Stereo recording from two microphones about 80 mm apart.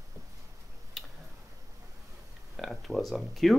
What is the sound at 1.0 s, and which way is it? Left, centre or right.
Tick-tock, centre.